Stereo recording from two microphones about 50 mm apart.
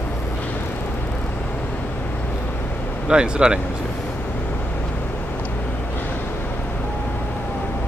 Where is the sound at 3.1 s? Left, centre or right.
Centre.